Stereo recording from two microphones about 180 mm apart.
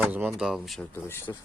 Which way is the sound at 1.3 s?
20° left (ahead or behind).